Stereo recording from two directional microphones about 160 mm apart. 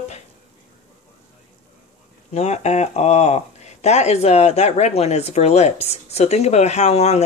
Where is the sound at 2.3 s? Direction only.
40° left (ahead or behind).